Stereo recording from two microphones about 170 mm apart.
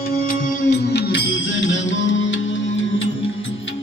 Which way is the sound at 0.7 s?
75° left (ahead or behind).